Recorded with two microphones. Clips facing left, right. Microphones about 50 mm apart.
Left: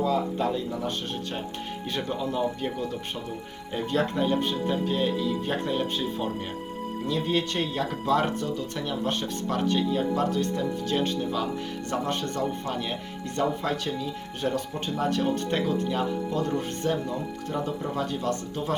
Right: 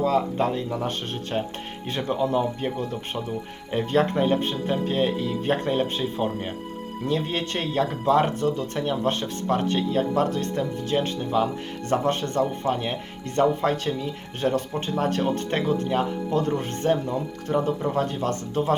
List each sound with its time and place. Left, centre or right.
0.0 s speech: right
2.0 s speech: centre
3.7 s speech: right
7.1 s speech: right
10.8 s speech: right
11.9 s speech: right